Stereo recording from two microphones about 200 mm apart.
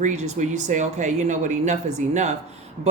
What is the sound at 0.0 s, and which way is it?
Speech, 35° right (ahead or behind).